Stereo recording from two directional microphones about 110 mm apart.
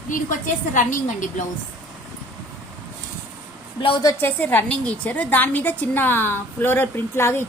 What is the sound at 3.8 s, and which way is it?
Speech, 50° left (ahead or behind).